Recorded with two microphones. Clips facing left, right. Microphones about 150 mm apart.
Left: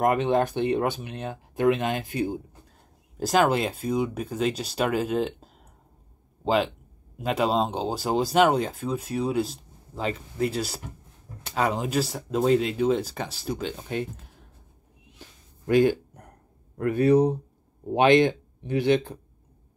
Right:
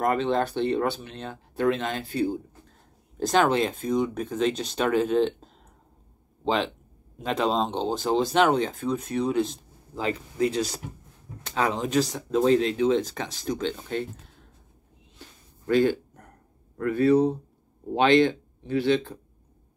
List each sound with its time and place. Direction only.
0.0 s speech: 15° left (ahead or behind)
3.2 s speech: 5° left (ahead or behind)
15.7 s speech: 15° left (ahead or behind)